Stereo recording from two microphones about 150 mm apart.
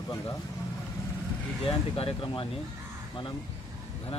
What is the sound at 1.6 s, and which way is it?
Speech, 40° left (ahead or behind).